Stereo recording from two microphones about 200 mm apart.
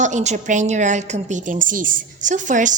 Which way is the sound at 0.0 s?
35° right (ahead or behind).